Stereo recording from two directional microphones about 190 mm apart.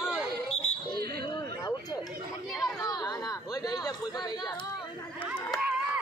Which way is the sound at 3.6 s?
20° left (ahead or behind).